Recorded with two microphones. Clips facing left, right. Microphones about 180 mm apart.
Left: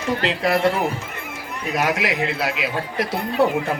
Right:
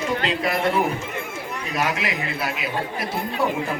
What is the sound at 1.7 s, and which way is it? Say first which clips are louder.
A man's voice: left 4 dB; 75° left (ahead or behind).